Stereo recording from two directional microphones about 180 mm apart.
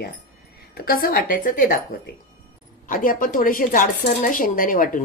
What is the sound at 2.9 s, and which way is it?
Speech, 50° left (ahead or behind).